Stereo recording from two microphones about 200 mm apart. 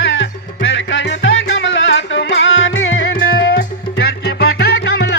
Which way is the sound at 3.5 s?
50° left (ahead or behind).